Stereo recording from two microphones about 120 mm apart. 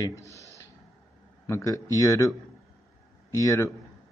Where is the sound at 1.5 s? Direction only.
30° left (ahead or behind).